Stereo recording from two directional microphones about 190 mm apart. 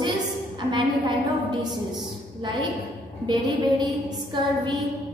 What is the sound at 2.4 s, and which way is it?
Speech, 25° right (ahead or behind).